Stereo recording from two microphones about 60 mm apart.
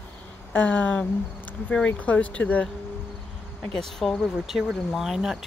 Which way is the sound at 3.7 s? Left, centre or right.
Centre.